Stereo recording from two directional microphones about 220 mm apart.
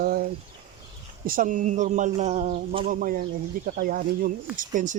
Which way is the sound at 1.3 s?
35° right (ahead or behind).